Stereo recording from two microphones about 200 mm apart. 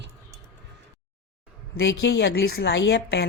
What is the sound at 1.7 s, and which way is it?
A woman's voice, 60° left (ahead or behind).